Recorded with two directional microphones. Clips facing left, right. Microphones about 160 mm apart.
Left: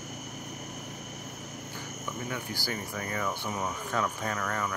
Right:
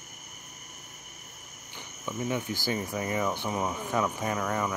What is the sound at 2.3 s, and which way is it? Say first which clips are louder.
Speech: right 7 dB; 20° right (ahead or behind).